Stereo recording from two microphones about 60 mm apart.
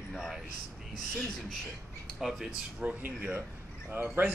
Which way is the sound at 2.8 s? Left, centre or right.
Right.